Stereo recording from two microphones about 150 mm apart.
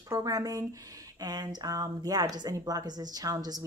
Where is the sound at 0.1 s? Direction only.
25° right (ahead or behind).